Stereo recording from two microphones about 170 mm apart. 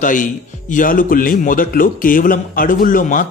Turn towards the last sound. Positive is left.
turn(degrees=50)  # may be behind; listen again after turning